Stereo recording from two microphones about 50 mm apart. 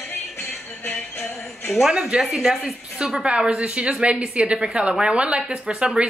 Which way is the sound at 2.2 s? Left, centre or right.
Centre.